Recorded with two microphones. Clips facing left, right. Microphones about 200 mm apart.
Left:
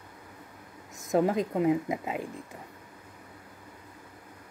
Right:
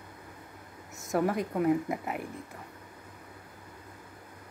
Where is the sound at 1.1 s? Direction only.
20° left (ahead or behind).